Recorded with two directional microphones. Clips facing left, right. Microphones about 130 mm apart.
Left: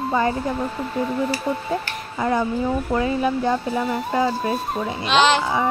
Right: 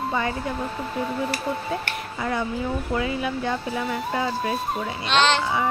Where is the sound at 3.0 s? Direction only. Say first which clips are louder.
Left 5 dB; 35° left (ahead or behind).